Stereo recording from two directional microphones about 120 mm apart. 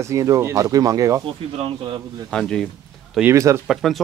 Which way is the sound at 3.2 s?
25° right (ahead or behind).